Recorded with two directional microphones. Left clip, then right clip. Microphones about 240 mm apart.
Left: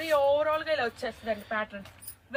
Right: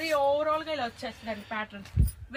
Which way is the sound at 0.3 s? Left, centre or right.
Left.